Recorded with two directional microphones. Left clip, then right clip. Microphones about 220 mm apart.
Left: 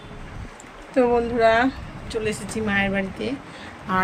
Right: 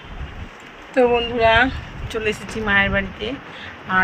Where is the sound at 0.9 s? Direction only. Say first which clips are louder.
Right 3 dB; 15° left (ahead or behind).